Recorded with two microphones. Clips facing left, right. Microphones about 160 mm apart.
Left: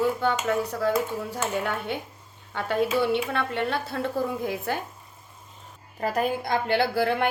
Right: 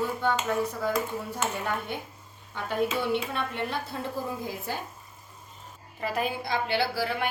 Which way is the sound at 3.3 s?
70° left (ahead or behind).